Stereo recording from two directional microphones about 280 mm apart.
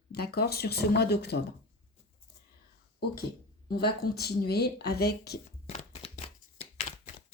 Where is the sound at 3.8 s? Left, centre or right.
Left.